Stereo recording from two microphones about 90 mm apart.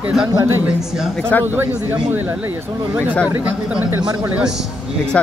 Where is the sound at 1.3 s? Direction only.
20° left (ahead or behind).